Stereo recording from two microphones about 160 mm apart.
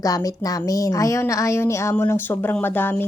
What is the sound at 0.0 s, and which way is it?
A woman's voice, 20° left (ahead or behind).